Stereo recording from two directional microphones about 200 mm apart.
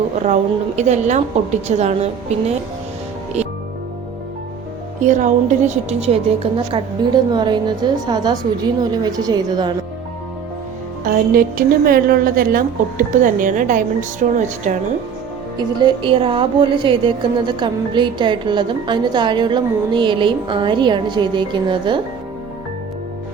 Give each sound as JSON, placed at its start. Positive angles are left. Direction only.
{"t": 0.8, "sound": "a woman's voice", "side_deg": -35}
{"t": 4.9, "sound": "a woman's voice", "side_deg": -40}
{"t": 11.0, "sound": "a woman's voice", "side_deg": -45}
{"t": 15.5, "sound": "a woman's voice", "side_deg": -20}